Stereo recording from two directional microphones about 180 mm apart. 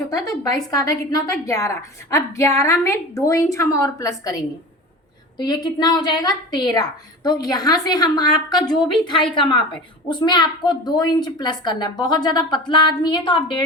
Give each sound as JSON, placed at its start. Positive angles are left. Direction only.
{"t": 0.1, "sound": "a woman's voice", "side_deg": 20}
{"t": 5.6, "sound": "a woman's voice", "side_deg": 20}